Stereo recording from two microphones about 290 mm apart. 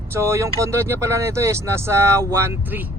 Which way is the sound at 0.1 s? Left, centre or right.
Centre.